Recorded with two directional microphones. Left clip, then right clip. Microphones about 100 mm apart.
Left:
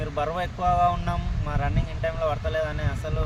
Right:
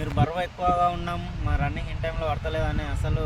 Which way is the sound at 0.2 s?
45° left (ahead or behind).